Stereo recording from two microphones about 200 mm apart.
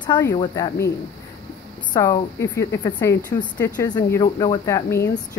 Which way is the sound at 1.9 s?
15° left (ahead or behind).